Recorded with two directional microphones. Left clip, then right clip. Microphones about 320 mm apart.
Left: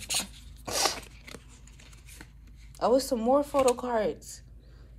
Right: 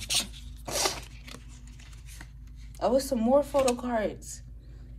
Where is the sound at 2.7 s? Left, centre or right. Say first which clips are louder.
Left 1 dB; centre.